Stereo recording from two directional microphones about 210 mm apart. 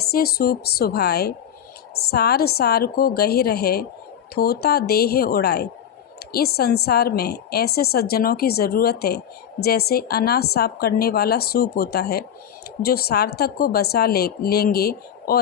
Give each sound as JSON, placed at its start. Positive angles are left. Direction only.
{"t": 0.0, "sound": "a woman's voice", "side_deg": 50}